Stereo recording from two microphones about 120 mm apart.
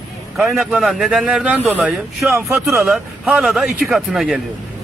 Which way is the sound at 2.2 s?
25° right (ahead or behind).